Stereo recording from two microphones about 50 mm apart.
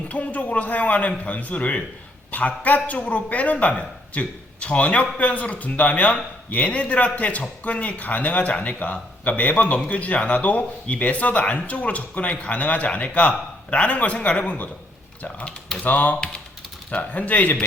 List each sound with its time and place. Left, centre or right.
0.1 s a man's voice: left